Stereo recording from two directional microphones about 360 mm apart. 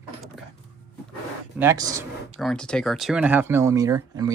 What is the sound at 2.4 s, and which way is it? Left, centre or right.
Speech, centre.